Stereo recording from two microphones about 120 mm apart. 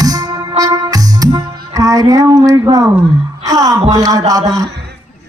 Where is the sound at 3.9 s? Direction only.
30° right (ahead or behind).